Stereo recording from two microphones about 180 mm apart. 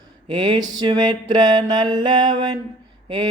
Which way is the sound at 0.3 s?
25° right (ahead or behind).